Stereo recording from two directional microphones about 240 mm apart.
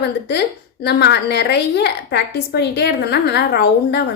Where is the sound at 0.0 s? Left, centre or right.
Left.